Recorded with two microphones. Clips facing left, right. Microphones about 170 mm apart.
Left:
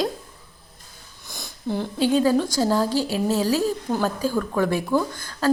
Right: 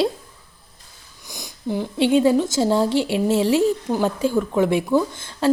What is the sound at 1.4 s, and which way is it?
Sniff, 15° right (ahead or behind).